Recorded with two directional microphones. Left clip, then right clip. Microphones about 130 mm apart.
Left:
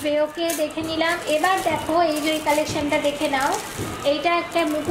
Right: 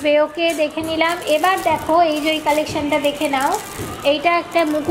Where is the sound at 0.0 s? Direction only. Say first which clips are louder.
Right 6 dB; 25° right (ahead or behind).